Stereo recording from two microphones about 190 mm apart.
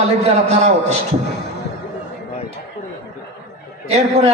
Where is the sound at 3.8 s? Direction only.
35° right (ahead or behind).